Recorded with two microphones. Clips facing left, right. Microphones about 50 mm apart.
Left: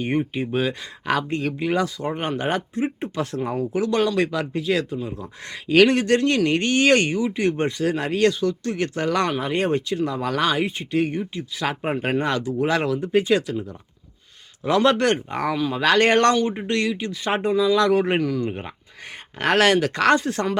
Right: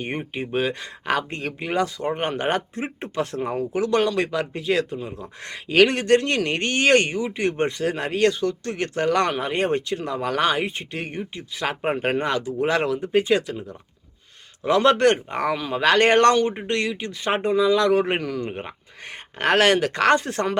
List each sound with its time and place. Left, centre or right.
0.0 s speech: right
2.6 s speech: right
3.2 s speech: right
7.1 s speech: right
12.2 s speech: centre
14.6 s speech: right
18.2 s speech: right